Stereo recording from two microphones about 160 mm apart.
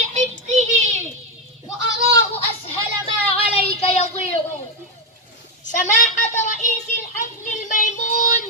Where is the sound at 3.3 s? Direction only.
40° left (ahead or behind).